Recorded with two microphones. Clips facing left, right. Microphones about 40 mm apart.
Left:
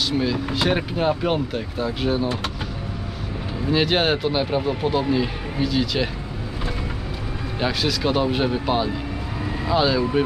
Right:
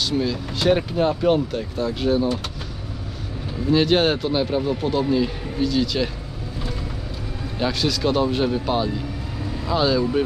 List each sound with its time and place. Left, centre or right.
0.0 s speech: centre
3.7 s speech: centre
7.6 s speech: centre